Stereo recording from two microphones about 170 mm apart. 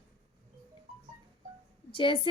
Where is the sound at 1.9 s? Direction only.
30° left (ahead or behind).